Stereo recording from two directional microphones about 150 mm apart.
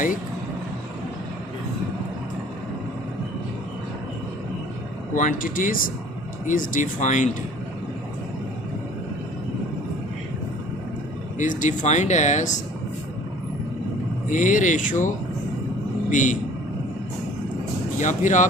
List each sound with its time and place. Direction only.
5.1 s speech: 60° left (ahead or behind)
11.3 s speech: 55° left (ahead or behind)
14.3 s a man's voice: 55° left (ahead or behind)
18.0 s speech: 55° left (ahead or behind)